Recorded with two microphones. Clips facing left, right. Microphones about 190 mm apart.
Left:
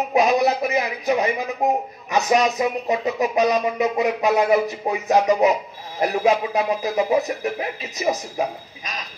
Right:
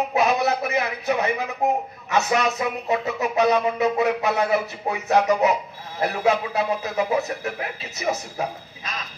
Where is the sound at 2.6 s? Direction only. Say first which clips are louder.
Left 3 dB; 15° left (ahead or behind).